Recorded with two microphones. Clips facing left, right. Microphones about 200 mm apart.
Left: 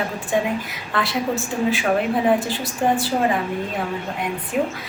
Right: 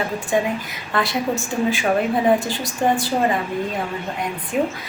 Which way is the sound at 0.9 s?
Centre (ahead or behind).